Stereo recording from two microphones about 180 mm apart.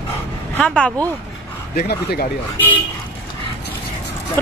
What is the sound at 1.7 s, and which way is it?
Speech, 60° left (ahead or behind).